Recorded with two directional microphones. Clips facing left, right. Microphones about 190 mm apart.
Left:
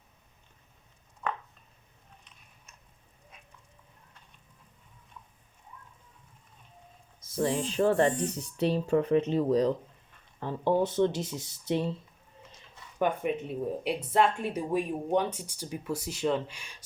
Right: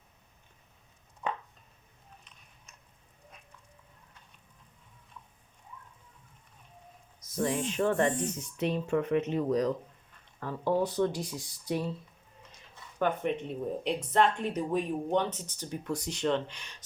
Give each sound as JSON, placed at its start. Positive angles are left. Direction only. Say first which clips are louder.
{"t": 1.2, "sound": "chopping", "louder": "even", "side_deg": -15}
{"t": 7.2, "sound": "speech", "louder": "left 2 dB", "side_deg": 30}
{"t": 13.0, "sound": "speech", "louder": "left 1 dB", "side_deg": 10}